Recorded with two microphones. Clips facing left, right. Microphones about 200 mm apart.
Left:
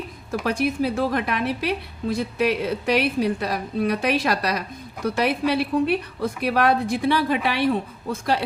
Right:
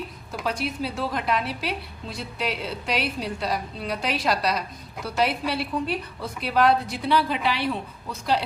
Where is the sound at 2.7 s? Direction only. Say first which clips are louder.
Left 6 dB; 55° left (ahead or behind).